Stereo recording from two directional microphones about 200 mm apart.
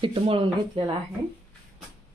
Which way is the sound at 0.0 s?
25° right (ahead or behind).